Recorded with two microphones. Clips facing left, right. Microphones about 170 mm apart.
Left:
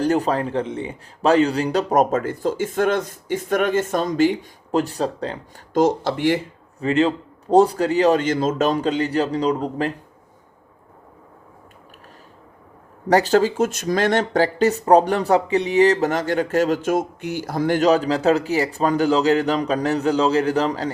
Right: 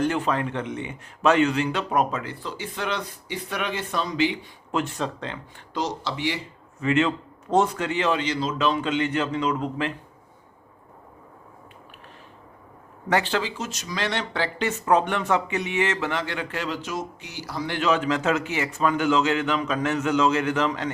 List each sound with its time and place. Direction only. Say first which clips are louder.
0.0 s speech: left 4 dB; 35° left (ahead or behind)
6.7 s a man's voice: left 4 dB; 35° left (ahead or behind)
13.1 s speech: left 8 dB; 40° left (ahead or behind)